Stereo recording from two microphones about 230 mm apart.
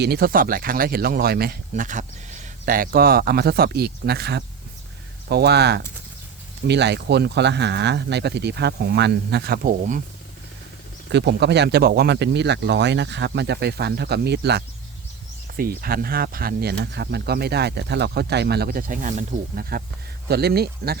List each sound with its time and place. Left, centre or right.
0.0 s speech: right
11.1 s speech: right